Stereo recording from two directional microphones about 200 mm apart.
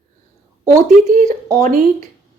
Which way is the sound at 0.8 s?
40° right (ahead or behind).